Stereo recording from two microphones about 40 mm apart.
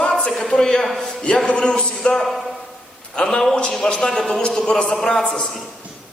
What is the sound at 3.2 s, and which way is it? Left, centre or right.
Speech, left.